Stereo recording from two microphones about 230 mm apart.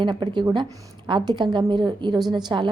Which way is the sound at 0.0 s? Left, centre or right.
Centre.